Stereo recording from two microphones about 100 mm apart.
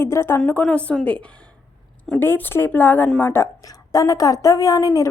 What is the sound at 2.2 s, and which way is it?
A woman's voice, 20° left (ahead or behind).